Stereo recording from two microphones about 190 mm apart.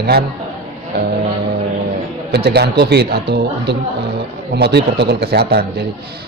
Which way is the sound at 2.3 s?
60° right (ahead or behind).